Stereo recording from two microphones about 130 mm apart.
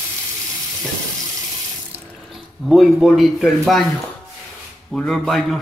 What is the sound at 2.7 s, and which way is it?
A man's voice, centre (ahead or behind).